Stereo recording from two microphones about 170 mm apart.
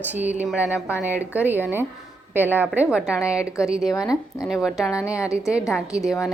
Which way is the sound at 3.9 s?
20° left (ahead or behind).